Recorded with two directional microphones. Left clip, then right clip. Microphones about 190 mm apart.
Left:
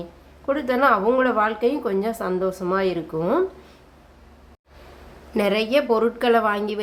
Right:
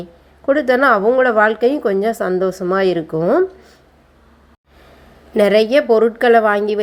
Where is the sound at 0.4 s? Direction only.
25° right (ahead or behind).